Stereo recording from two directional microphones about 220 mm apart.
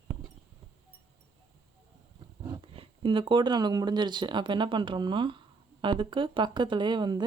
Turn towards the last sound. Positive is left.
turn(degrees=-20)  # may be behind; listen again after turning